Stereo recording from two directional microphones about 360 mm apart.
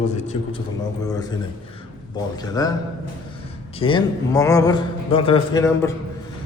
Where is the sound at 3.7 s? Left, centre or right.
Centre.